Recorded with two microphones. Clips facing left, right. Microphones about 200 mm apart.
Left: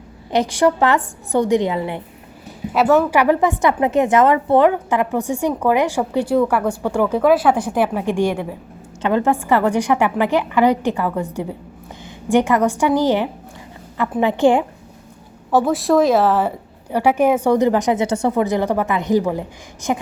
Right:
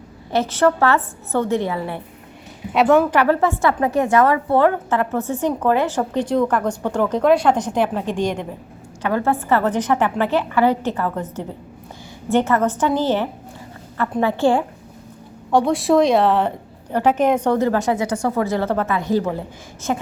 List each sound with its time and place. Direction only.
0.3 s a woman's voice: 15° left (ahead or behind)
2.7 s a woman's voice: centre (ahead or behind)
3.2 s a woman's voice: 15° left (ahead or behind)
9.0 s a woman's voice: 20° left (ahead or behind)
15.5 s a woman's voice: centre (ahead or behind)